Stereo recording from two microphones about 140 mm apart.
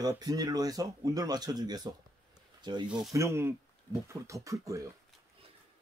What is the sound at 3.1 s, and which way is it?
Speech, 20° right (ahead or behind).